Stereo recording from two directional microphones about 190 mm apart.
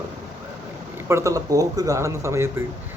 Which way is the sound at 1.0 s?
15° right (ahead or behind).